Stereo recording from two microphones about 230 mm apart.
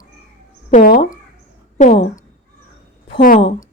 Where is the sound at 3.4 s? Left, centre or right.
Left.